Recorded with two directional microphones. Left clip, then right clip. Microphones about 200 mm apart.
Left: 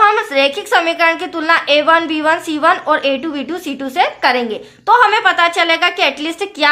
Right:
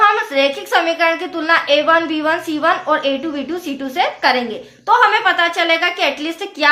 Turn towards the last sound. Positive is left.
turn(degrees=35)  # may be behind; listen again after turning